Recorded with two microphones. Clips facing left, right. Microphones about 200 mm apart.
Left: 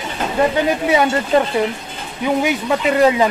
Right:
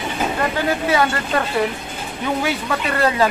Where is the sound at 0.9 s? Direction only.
20° left (ahead or behind).